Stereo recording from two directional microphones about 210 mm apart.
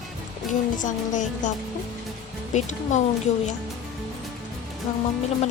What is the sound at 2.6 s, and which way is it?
Speech, 35° left (ahead or behind).